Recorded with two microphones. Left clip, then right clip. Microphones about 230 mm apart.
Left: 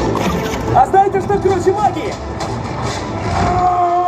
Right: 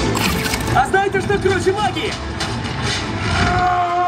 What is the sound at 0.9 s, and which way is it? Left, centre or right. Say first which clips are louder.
Speech: left 4 dB; centre.